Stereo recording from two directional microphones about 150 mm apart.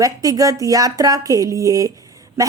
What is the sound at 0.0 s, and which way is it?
A woman's voice, 25° right (ahead or behind).